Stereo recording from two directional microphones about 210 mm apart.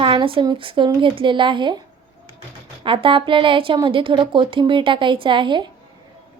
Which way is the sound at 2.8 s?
25° right (ahead or behind).